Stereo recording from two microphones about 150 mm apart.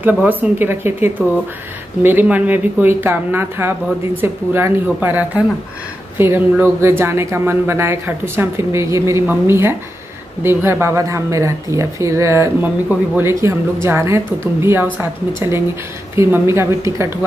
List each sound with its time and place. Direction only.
0.0 s speech: 10° right (ahead or behind)